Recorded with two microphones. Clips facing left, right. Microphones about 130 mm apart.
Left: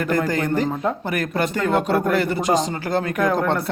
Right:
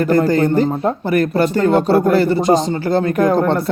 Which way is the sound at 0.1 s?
35° right (ahead or behind).